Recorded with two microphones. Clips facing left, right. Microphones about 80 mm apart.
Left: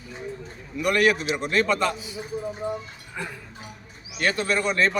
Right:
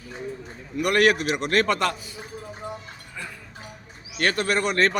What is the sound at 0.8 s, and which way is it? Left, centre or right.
A man's voice, right.